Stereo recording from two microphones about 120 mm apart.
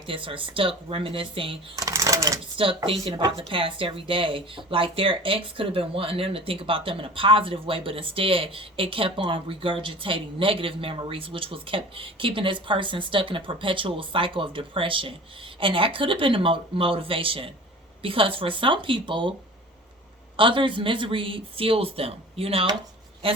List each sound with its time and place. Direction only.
0.1 s speech: 45° right (ahead or behind)
1.7 s speech: 30° right (ahead or behind)
2.6 s speech: 50° right (ahead or behind)
20.3 s speech: 45° right (ahead or behind)